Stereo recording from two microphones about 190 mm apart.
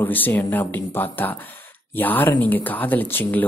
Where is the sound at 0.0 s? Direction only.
10° left (ahead or behind).